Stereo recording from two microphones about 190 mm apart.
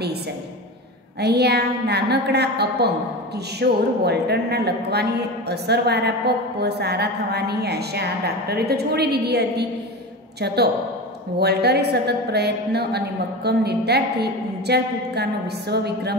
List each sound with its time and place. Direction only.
1.2 s a woman's voice: 60° right (ahead or behind)